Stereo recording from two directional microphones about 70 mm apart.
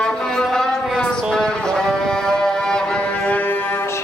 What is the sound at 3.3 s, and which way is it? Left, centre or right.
Music, left.